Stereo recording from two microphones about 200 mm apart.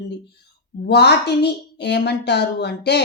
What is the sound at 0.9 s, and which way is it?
A woman's voice, 55° left (ahead or behind).